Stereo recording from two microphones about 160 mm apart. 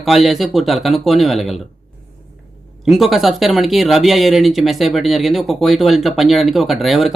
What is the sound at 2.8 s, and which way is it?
Speech, centre (ahead or behind).